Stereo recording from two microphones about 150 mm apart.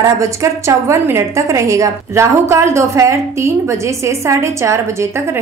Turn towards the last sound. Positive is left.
turn(degrees=-20)  # may be behind; listen again after turning